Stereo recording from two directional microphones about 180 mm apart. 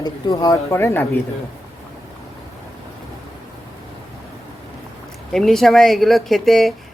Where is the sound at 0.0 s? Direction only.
20° left (ahead or behind).